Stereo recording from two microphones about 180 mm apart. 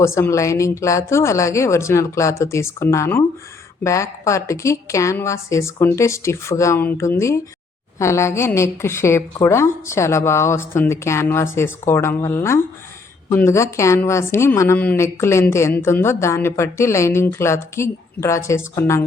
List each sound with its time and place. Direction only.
0.0 s a woman's voice: 15° left (ahead or behind)